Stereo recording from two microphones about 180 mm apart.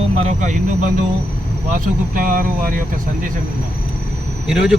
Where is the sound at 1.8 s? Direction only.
50° right (ahead or behind).